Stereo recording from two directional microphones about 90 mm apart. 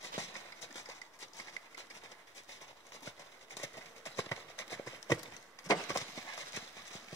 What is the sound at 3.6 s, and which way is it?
Horse, 35° left (ahead or behind).